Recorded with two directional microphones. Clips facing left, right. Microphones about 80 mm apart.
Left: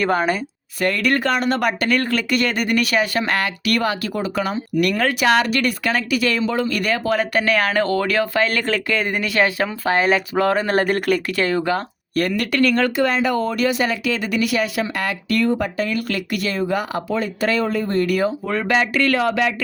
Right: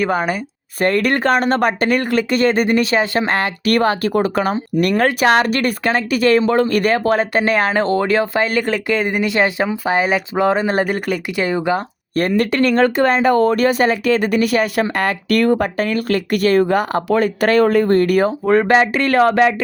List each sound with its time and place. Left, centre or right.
0.0 s speech: centre
0.8 s speech: right
2.0 s speech: centre
2.3 s speech: right
8.4 s speech: centre
11.3 s speech: centre
12.1 s speech: right